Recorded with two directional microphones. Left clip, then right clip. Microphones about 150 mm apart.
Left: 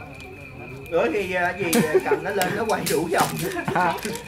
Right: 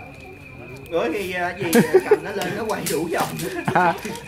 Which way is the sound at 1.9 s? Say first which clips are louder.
Right 4 dB; 65° right (ahead or behind).